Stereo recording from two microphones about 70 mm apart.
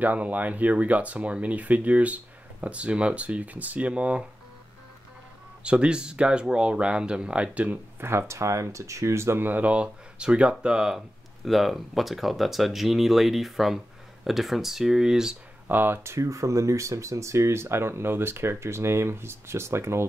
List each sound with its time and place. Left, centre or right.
0.0 s speech: right
5.6 s speech: centre
8.0 s speech: right
9.5 s speech: right
15.7 s speech: right